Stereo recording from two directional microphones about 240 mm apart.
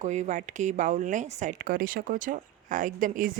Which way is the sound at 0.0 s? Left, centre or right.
Right.